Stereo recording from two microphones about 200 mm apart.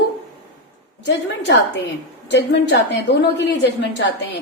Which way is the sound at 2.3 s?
60° left (ahead or behind).